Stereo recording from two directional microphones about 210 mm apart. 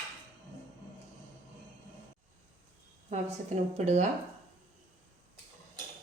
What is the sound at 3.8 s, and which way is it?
Speech, 35° right (ahead or behind).